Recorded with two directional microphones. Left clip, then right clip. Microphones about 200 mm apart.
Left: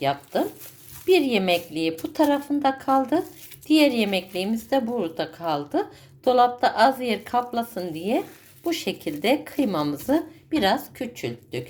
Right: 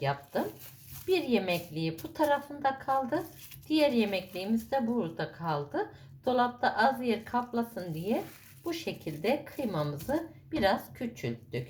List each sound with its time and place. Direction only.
1.0 s a woman's voice: 40° left (ahead or behind)